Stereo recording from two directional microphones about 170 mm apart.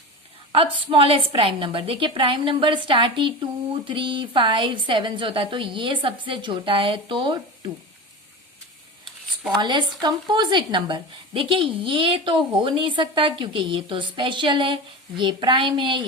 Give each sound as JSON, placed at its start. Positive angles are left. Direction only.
{"t": 0.5, "sound": "a woman's voice", "side_deg": -30}
{"t": 9.6, "sound": "a woman's voice", "side_deg": -25}